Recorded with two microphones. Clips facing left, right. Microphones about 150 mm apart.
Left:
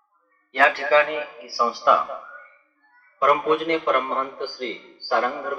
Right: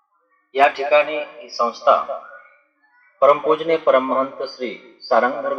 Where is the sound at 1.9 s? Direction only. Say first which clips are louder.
Right 5 dB; 25° right (ahead or behind).